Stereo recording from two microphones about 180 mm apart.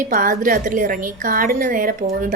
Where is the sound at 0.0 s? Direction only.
50° right (ahead or behind).